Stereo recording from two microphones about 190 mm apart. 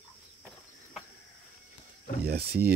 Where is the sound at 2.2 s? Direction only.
55° right (ahead or behind).